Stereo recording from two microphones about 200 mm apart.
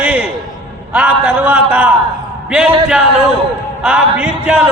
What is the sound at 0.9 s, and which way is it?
Speech, 5° right (ahead or behind).